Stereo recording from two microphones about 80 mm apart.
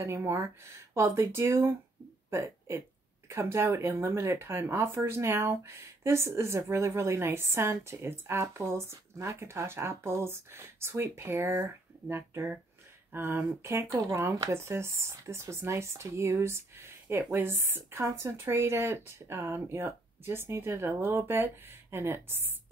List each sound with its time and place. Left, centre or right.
0.0 s speech: right